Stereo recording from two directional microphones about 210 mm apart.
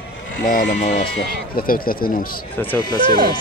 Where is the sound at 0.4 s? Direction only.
40° left (ahead or behind).